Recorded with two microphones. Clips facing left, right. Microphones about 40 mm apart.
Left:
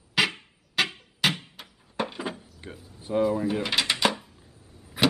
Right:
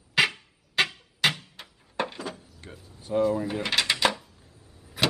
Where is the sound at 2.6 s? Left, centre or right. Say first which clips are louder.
Left 1 dB; centre.